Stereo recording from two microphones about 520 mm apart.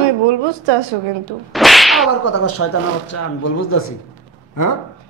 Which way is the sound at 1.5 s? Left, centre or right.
Centre.